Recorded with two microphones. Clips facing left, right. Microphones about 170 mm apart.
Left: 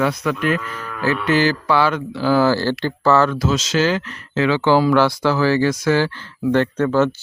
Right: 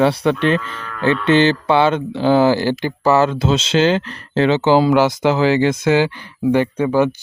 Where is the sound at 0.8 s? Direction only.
10° left (ahead or behind).